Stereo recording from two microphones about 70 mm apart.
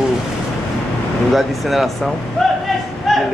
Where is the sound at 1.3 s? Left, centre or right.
Centre.